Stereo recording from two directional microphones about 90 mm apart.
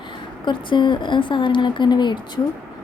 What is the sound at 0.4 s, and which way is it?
A woman's voice, 60° left (ahead or behind).